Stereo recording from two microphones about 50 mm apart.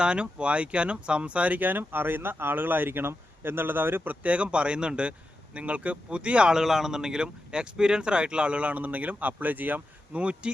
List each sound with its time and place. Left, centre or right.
0.0 s speech: right
6.5 s speech: centre; by 10.5 s right